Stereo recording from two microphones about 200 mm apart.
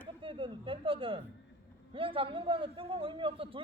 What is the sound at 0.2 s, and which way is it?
A man's voice, 25° right (ahead or behind).